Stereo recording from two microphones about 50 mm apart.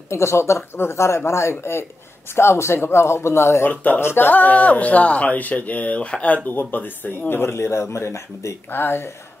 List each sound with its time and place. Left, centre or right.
0.1 s a man's voice: left
4.3 s speech: left
8.7 s speech: left